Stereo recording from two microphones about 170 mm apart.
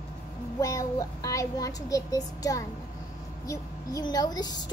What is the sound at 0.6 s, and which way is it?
A woman's voice, 20° left (ahead or behind).